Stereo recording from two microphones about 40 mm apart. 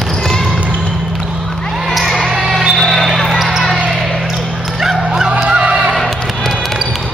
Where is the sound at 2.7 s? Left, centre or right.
Centre.